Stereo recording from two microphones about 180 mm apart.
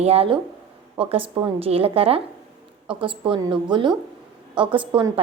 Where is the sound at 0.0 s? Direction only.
35° right (ahead or behind).